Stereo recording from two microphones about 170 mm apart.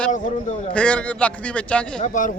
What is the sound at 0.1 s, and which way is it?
Speech, 45° left (ahead or behind).